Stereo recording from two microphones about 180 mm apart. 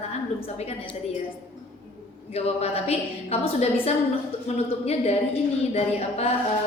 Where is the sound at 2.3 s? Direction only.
35° left (ahead or behind).